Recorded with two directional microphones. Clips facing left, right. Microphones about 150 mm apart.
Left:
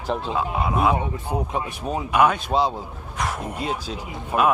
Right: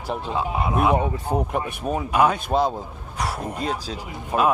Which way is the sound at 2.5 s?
50° right (ahead or behind).